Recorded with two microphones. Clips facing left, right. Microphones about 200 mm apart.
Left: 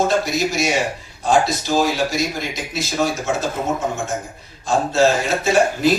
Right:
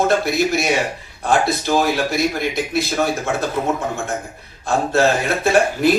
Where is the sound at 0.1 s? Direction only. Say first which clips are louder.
Right 2 dB; 60° right (ahead or behind).